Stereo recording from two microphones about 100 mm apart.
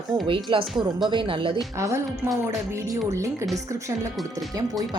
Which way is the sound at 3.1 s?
30° right (ahead or behind).